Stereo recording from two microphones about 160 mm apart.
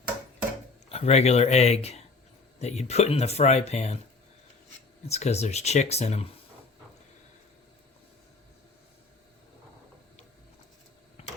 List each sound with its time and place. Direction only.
0.9 s speech: 40° left (ahead or behind)
5.0 s speech: 40° left (ahead or behind)